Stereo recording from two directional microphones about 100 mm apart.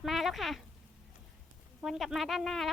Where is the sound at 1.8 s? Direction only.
Centre (ahead or behind).